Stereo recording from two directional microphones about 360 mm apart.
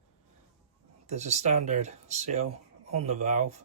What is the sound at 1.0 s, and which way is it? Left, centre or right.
Speech, centre.